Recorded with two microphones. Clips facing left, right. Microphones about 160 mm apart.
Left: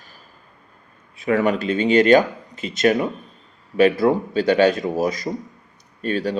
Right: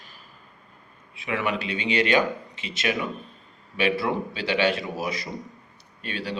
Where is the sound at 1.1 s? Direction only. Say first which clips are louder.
Left 8 dB; 45° left (ahead or behind).